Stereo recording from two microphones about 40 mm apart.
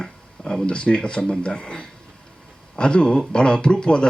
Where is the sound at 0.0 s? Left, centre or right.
Centre.